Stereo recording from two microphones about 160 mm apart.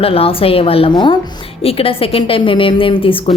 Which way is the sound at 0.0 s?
35° left (ahead or behind).